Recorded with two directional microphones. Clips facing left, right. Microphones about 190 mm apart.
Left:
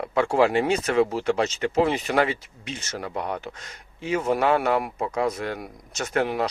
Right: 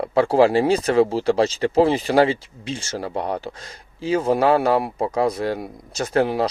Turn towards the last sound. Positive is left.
turn(degrees=-30)  # may be behind; listen again after turning